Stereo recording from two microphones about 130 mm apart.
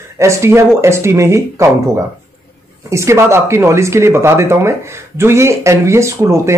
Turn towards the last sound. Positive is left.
turn(degrees=-20)  # may be behind; listen again after turning